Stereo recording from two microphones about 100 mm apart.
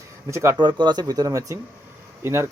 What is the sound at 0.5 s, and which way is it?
Speech, 50° right (ahead or behind).